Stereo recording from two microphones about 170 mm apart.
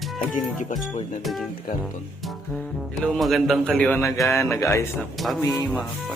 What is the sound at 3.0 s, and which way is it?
Music, centre (ahead or behind).